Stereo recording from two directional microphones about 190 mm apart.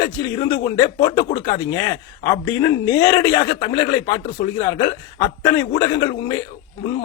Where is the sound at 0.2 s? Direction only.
20° left (ahead or behind).